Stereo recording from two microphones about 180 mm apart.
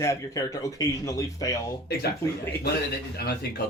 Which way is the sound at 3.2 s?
60° left (ahead or behind).